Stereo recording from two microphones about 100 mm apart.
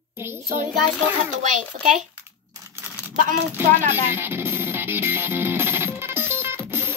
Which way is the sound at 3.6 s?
25° right (ahead or behind).